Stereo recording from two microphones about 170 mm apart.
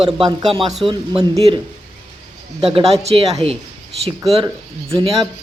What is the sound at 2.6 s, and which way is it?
Speech, 35° right (ahead or behind).